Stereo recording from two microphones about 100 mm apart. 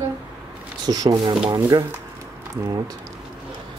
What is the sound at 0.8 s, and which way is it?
Speech, 40° right (ahead or behind).